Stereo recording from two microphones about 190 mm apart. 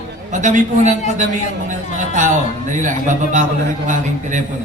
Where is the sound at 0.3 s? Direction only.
40° right (ahead or behind).